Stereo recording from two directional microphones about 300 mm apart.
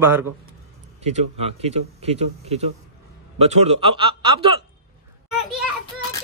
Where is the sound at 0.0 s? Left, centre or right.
Centre.